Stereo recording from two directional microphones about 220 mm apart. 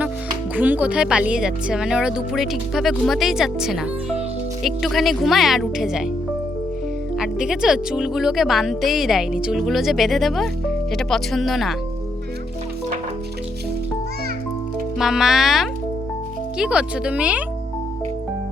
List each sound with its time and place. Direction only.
0.5 s speech: 5° right (ahead or behind)
7.2 s speech: 5° right (ahead or behind)
14.9 s speech: centre (ahead or behind)